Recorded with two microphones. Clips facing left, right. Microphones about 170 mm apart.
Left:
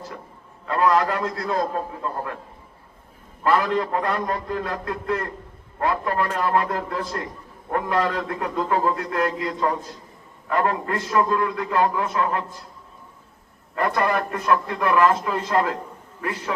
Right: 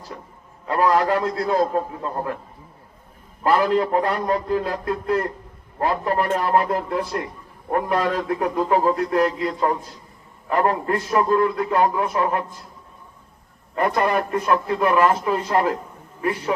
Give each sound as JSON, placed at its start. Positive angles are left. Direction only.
{"t": 0.7, "sound": "a man's voice", "side_deg": -25}
{"t": 3.4, "sound": "a man's voice", "side_deg": -30}
{"t": 13.7, "sound": "a man's voice", "side_deg": -25}